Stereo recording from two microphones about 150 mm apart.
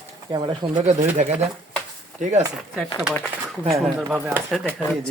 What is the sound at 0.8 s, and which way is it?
Speech, 50° right (ahead or behind).